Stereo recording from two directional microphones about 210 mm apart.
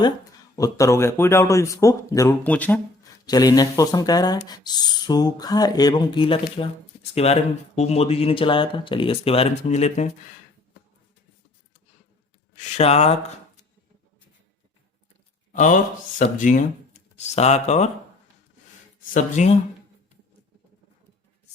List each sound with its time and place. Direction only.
0.5 s speech: 15° left (ahead or behind); by 10.1 s 30° left (ahead or behind)
12.7 s speech: 30° left (ahead or behind)
15.5 s speech: 35° left (ahead or behind)
19.1 s speech: 35° left (ahead or behind)